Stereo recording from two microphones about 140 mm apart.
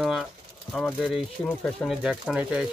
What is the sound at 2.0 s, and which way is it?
Speech, 5° right (ahead or behind).